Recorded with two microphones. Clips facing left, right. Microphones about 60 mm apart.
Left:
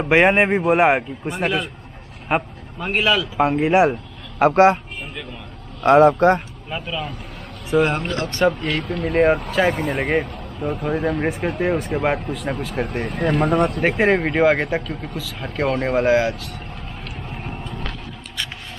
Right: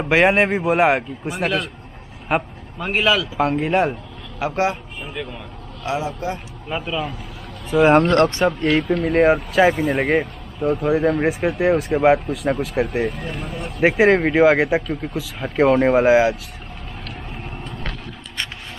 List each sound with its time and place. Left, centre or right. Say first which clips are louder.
0.0 s speech: left 1 dB; centre
4.4 s speech: left 8 dB; left
5.9 s speech: left 12 dB; left
6.7 s speech: right 3 dB; centre
7.7 s speech: right 2 dB; centre
8.4 s speech: right 1 dB; centre
13.1 s speech: left 11 dB; left
13.7 s speech: right 3 dB; centre